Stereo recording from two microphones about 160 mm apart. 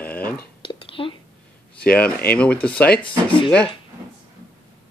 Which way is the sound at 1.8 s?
10° left (ahead or behind).